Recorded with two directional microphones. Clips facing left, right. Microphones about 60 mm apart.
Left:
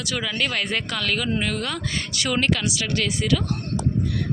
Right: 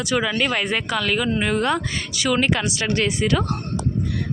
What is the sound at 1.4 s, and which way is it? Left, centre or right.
Speech, right.